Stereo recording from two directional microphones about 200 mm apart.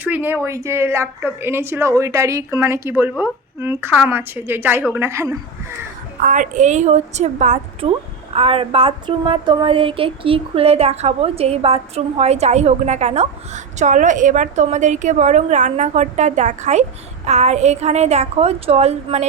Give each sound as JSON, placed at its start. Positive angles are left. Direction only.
{"t": 0.0, "sound": "a woman's voice", "side_deg": -10}
{"t": 6.2, "sound": "a woman's voice", "side_deg": -40}